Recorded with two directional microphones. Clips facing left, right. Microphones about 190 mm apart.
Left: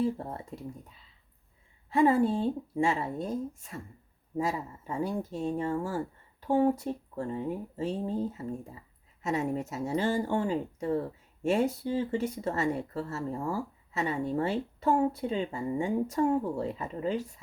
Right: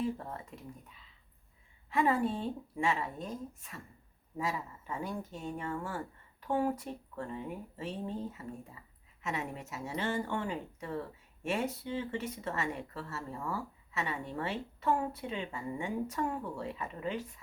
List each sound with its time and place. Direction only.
0.0 s speech: 30° left (ahead or behind)
1.9 s speech: 30° left (ahead or behind)